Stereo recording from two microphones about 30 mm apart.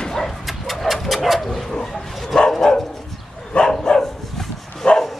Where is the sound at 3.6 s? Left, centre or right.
Left.